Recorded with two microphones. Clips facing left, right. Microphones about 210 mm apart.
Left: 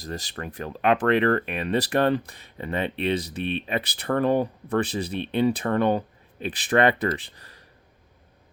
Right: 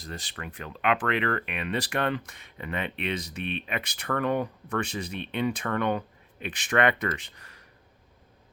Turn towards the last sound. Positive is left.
turn(degrees=35)  # may be behind; listen again after turning